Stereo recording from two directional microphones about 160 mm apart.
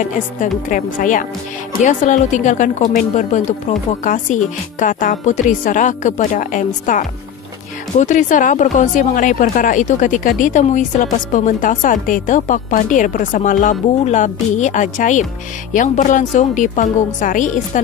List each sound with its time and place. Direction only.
0.0 s a woman's voice: 55° left (ahead or behind)